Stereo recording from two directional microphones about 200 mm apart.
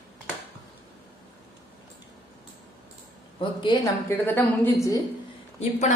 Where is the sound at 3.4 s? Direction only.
25° left (ahead or behind).